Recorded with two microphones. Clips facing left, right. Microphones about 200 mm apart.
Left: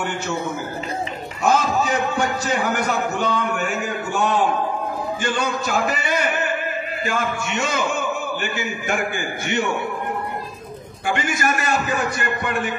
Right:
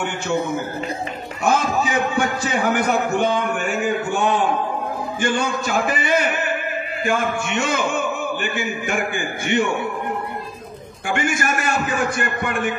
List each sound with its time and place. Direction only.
1.5 s a man's voice: 55° right (ahead or behind)
11.1 s a man's voice: 55° right (ahead or behind)